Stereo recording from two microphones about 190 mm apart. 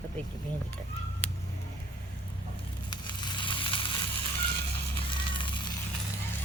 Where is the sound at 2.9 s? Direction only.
20° left (ahead or behind).